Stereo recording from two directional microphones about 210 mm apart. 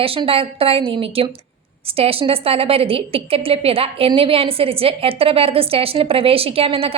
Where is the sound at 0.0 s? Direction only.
25° right (ahead or behind).